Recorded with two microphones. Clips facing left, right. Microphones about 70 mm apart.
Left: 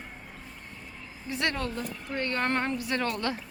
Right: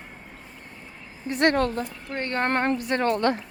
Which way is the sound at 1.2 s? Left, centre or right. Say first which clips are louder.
Right 9 dB; right.